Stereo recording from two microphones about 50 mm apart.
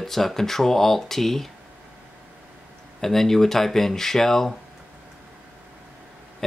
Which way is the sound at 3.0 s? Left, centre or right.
Centre.